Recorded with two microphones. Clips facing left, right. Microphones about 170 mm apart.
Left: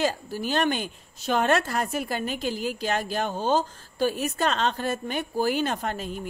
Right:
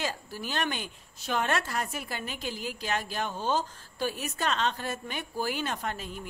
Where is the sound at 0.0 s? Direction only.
35° left (ahead or behind).